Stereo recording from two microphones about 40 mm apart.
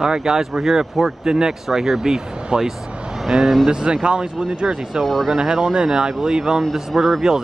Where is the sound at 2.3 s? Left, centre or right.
Right.